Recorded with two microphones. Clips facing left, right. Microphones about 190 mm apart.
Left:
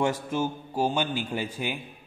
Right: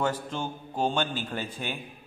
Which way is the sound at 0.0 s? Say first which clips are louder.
Left 3 dB; 10° left (ahead or behind).